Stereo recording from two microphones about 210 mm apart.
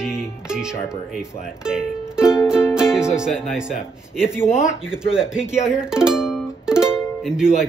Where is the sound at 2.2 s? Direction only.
15° left (ahead or behind).